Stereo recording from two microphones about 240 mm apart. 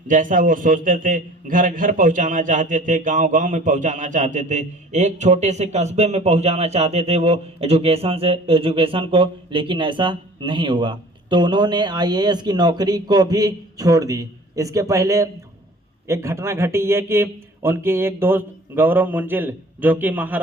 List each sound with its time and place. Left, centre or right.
0.1 s a man's voice: right; by 20.4 s centre